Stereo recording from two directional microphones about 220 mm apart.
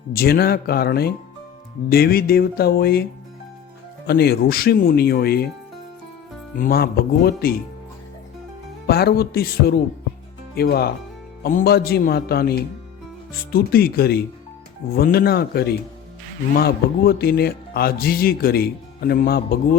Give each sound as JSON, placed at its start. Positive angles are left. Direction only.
{"t": 0.1, "sound": "speech", "side_deg": 45}
{"t": 4.0, "sound": "speech", "side_deg": 45}
{"t": 6.6, "sound": "speech", "side_deg": 45}
{"t": 8.9, "sound": "speech", "side_deg": 45}